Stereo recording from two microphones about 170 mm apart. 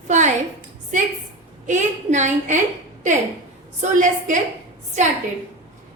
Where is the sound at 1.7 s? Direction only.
45° right (ahead or behind).